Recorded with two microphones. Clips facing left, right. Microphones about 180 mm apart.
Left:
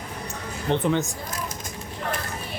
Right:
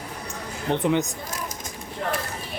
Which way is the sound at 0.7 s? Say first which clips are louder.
Right 1 dB; 15° right (ahead or behind).